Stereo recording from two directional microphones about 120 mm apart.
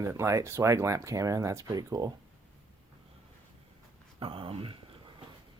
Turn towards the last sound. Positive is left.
turn(degrees=-50)  # may be behind; listen again after turning